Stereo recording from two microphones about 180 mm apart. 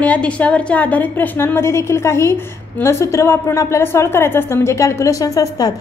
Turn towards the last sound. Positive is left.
turn(degrees=20)  # may be behind; listen again after turning